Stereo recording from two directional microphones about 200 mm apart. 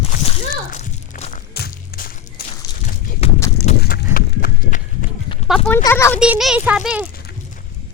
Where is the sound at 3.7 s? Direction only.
35° left (ahead or behind).